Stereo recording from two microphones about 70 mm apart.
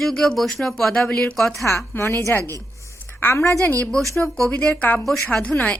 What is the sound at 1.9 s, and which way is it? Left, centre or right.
A woman's voice, left.